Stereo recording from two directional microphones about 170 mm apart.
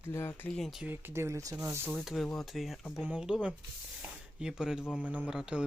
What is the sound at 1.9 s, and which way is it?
Speech, centre (ahead or behind).